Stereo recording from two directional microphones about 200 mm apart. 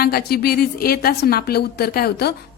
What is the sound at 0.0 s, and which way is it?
A woman's voice, 50° left (ahead or behind).